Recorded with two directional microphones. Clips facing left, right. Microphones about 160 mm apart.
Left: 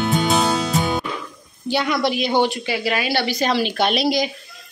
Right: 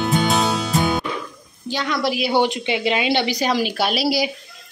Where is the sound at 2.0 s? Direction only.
5° right (ahead or behind).